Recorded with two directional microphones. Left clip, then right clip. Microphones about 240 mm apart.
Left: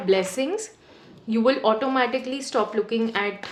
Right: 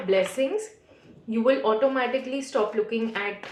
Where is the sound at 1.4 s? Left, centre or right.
Left.